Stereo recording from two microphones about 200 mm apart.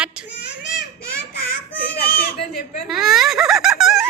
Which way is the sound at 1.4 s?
50° left (ahead or behind).